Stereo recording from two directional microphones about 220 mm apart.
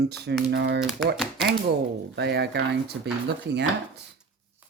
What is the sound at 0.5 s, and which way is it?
Speech, 50° right (ahead or behind).